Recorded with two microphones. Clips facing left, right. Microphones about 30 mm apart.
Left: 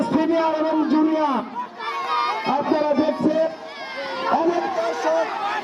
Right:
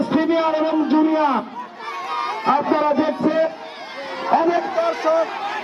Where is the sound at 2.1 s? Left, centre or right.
Left.